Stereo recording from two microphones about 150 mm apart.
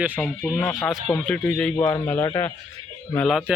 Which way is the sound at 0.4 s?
5° left (ahead or behind).